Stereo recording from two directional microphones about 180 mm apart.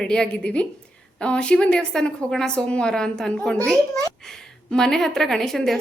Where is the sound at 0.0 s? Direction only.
5° left (ahead or behind).